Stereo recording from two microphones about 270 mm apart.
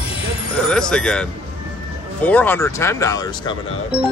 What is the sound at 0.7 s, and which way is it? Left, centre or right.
Speech, centre.